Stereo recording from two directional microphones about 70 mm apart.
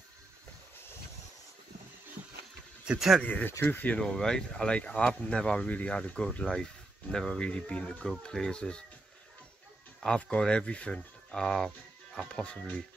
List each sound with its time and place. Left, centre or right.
3.3 s speech: left
4.0 s speech: centre
10.0 s speech: centre